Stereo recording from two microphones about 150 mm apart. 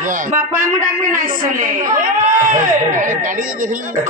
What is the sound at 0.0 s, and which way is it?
Speech, 60° right (ahead or behind).